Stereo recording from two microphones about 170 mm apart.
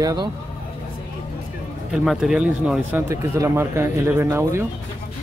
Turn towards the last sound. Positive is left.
turn(degrees=-15)  # may be behind; listen again after turning